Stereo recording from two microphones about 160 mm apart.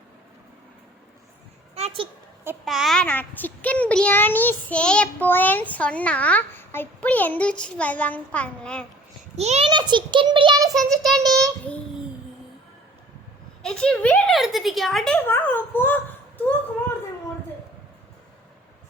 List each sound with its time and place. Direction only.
1.7 s a sound: 40° right (ahead or behind)
2.6 s a child's voice: centre (ahead or behind)
9.3 s a child's voice: 45° right (ahead or behind)
9.6 s a child's voice: 30° right (ahead or behind)
10.8 s a woman's voice: centre (ahead or behind)
11.2 s a child's voice: 20° right (ahead or behind)
13.6 s a woman's voice: 5° left (ahead or behind)